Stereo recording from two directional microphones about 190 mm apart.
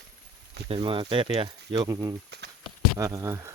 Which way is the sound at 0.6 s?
25° right (ahead or behind).